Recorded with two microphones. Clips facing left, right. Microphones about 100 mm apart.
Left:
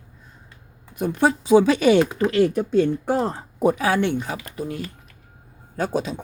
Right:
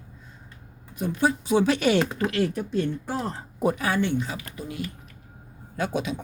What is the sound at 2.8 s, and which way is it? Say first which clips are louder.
A man's voice: left 8 dB; 80° left.